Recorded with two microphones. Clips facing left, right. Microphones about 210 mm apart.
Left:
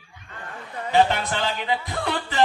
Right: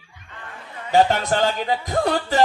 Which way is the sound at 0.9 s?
40° right (ahead or behind).